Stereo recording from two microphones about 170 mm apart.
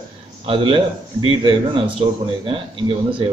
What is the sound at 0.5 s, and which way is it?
A man's voice, 30° right (ahead or behind).